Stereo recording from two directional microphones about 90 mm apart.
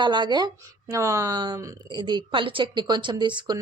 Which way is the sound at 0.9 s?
35° right (ahead or behind).